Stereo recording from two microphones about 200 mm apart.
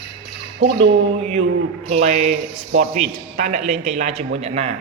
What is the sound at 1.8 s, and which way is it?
A man's voice, 35° right (ahead or behind).